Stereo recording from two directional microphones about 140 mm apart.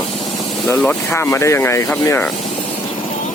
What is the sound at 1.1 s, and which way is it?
Sanding, 20° left (ahead or behind).